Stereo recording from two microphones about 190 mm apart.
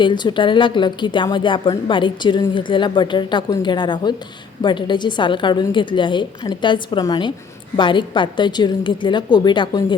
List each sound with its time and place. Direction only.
0.0 s a woman's voice: 25° left (ahead or behind)